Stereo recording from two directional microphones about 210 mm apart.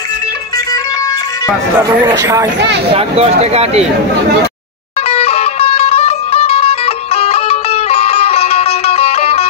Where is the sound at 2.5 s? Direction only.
55° right (ahead or behind).